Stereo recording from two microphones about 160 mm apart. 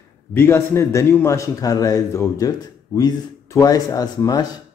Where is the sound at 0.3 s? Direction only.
15° left (ahead or behind).